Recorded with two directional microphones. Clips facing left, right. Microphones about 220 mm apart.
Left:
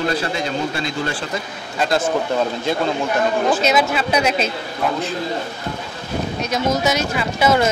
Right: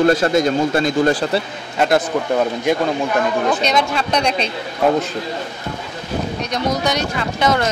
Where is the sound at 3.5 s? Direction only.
5° left (ahead or behind).